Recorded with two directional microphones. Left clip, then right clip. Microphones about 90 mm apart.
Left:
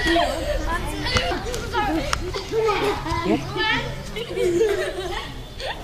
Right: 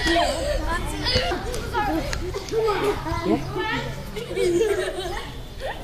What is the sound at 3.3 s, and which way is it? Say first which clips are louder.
Speech: even; 35° left (ahead or behind).